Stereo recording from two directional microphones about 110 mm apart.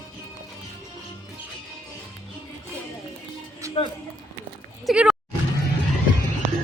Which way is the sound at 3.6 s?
30° right (ahead or behind).